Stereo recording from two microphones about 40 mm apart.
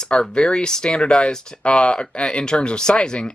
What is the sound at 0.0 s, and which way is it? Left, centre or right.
Speech, centre.